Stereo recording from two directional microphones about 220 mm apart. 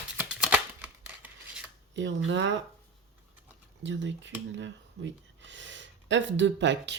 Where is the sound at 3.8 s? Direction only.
55° right (ahead or behind).